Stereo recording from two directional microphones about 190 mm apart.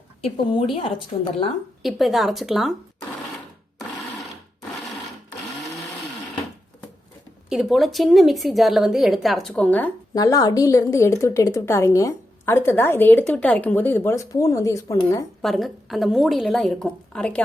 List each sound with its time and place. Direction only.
0.2 s a woman's voice: 30° left (ahead or behind)
1.8 s a woman's voice: centre (ahead or behind)
7.5 s a woman's voice: centre (ahead or behind)
10.2 s a woman's voice: 20° left (ahead or behind)
15.4 s a woman's voice: centre (ahead or behind)